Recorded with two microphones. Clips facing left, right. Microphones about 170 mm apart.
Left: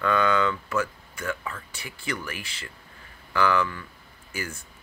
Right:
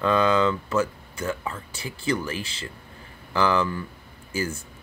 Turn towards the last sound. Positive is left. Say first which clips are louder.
# right 7 dB
turn(degrees=-25)  # may be behind; listen again after turning